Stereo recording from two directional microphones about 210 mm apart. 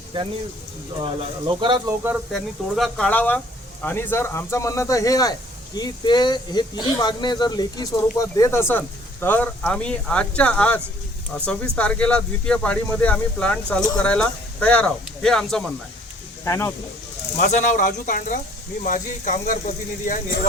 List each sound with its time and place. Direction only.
0.1 s speech: 25° right (ahead or behind)
2.3 s speech: centre (ahead or behind)
11.8 s speech: 5° left (ahead or behind)
16.4 s speech: 15° left (ahead or behind)
17.3 s speech: 40° left (ahead or behind)